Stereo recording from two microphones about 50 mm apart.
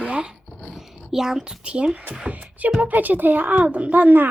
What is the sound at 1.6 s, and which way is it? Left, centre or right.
A child's voice, right.